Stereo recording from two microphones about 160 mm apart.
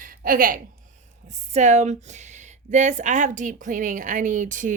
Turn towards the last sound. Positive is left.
turn(degrees=-50)  # may be behind; listen again after turning